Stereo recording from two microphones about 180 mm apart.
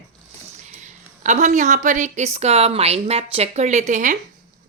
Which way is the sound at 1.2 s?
40° right (ahead or behind).